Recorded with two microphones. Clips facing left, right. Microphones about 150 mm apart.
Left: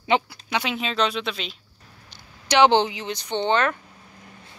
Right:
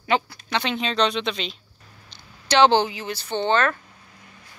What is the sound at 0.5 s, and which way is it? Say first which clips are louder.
Speech: right 1 dB; 10° left (ahead or behind).